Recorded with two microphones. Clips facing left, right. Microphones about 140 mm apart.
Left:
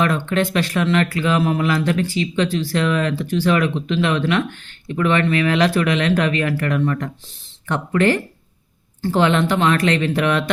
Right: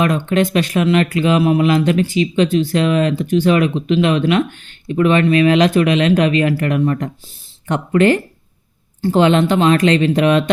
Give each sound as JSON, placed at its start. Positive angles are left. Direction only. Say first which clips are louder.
{"t": 0.0, "sound": "speech", "louder": "right 3 dB", "side_deg": -15}